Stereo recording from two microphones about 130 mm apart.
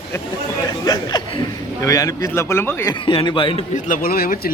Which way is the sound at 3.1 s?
40° left (ahead or behind).